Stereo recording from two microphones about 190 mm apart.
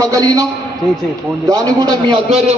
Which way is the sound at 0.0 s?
20° right (ahead or behind).